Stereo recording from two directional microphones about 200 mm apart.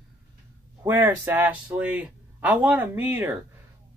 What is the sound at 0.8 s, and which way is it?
Speech, 10° right (ahead or behind).